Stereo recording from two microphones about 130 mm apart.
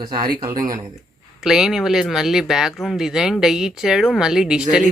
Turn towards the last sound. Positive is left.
turn(degrees=-5)  # may be behind; listen again after turning